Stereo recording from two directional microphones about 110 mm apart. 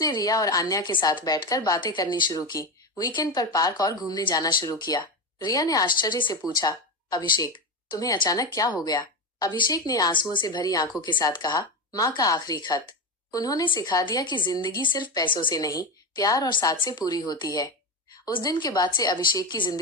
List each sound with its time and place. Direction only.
0.0 s a woman's voice: 35° left (ahead or behind)
0.9 s a woman's voice: 45° left (ahead or behind)
10.1 s a woman's voice: 50° left (ahead or behind)